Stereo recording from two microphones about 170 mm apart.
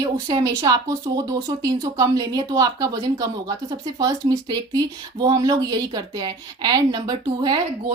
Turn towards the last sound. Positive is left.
turn(degrees=-25)  # may be behind; listen again after turning